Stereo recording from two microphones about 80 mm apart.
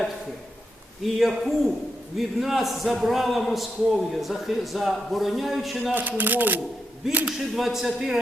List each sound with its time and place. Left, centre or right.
1.0 s a man's voice: centre
5.9 s speech: right
7.3 s a man's voice: centre